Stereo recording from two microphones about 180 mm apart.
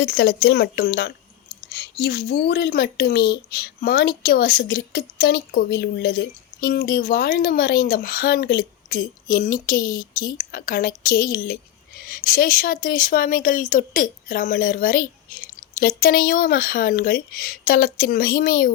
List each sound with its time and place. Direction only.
0.0 s speech: 60° left (ahead or behind)